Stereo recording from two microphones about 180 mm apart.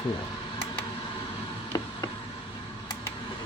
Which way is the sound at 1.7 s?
20° left (ahead or behind).